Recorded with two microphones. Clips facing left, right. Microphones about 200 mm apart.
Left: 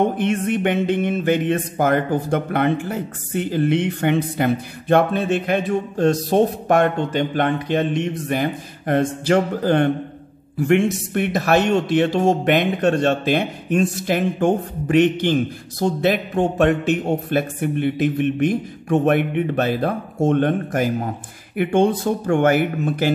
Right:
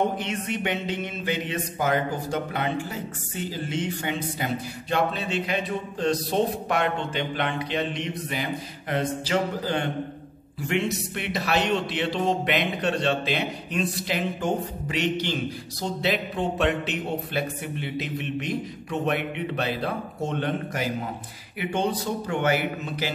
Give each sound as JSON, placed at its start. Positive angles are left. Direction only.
{"t": 0.2, "sound": "speech", "side_deg": 50}